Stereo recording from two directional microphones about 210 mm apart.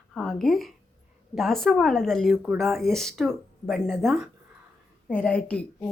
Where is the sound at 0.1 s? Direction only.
5° left (ahead or behind).